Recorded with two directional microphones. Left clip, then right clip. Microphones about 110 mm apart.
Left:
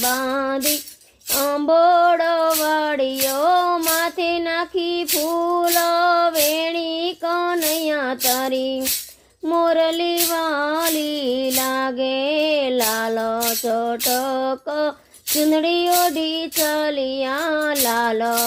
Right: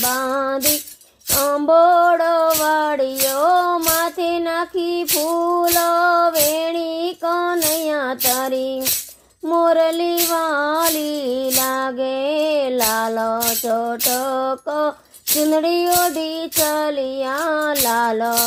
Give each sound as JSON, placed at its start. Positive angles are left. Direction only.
{"t": 1.4, "sound": "music", "side_deg": -40}
{"t": 2.6, "sound": "child singing", "side_deg": -45}
{"t": 5.1, "sound": "female singing", "side_deg": -35}
{"t": 6.3, "sound": "child singing", "side_deg": -45}
{"t": 9.5, "sound": "music", "side_deg": -40}
{"t": 15.4, "sound": "child singing", "side_deg": -40}
{"t": 16.7, "sound": "music", "side_deg": -50}